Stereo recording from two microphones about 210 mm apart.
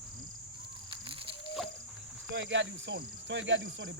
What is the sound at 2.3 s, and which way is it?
Speech, 60° right (ahead or behind).